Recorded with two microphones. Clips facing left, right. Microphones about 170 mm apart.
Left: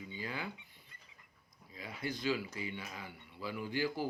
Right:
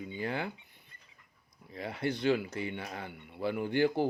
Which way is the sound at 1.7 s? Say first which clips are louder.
Right 7 dB; 65° right (ahead or behind).